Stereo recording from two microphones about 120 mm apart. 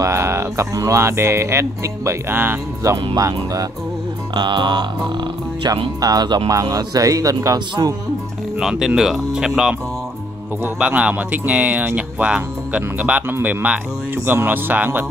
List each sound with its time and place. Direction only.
0.0 s speech: 25° right (ahead or behind)
4.4 s speech: 40° right (ahead or behind)
8.5 s speech: 5° right (ahead or behind)